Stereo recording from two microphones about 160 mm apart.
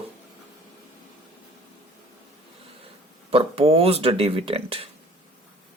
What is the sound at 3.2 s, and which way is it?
Speech, 35° right (ahead or behind).